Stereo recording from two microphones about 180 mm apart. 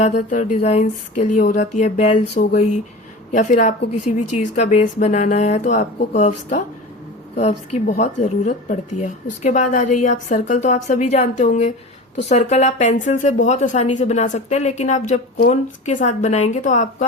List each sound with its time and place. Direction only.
0.0 s a woman's voice: 40° left (ahead or behind)
7.3 s a woman's voice: 40° left (ahead or behind)